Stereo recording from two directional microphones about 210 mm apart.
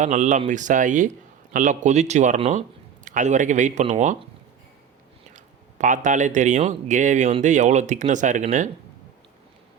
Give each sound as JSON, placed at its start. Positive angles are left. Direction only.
{"t": 0.0, "sound": "speech", "side_deg": -35}
{"t": 5.3, "sound": "speech", "side_deg": -35}